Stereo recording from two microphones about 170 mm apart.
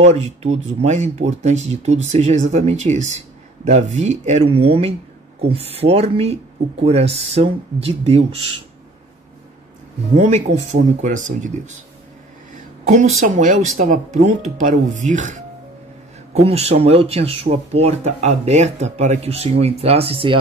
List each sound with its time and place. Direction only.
0.0 s speech: 40° right (ahead or behind)
10.1 s speech: 40° right (ahead or behind)
12.8 s speech: 45° right (ahead or behind)